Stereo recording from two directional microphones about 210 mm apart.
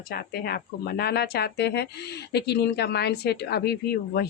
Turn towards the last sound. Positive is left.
turn(degrees=50)  # may be behind; listen again after turning